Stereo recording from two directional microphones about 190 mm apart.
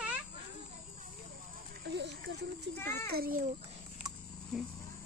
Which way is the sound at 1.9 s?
65° right (ahead or behind).